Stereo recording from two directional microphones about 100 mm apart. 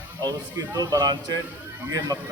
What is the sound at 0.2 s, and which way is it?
A man's voice, 35° right (ahead or behind).